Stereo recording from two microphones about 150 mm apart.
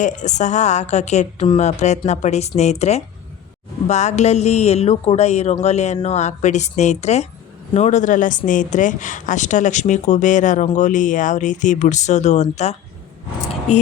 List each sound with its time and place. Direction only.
0.0 s speech: 55° left (ahead or behind)